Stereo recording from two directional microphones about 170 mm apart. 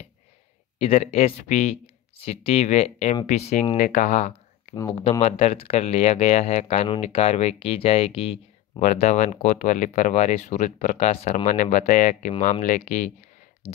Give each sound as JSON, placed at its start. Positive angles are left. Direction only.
{"t": 0.7, "sound": "speech", "side_deg": 40}
{"t": 4.7, "sound": "speech", "side_deg": 30}